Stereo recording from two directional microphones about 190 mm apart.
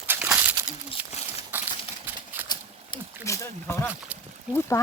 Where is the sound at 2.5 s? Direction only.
20° left (ahead or behind).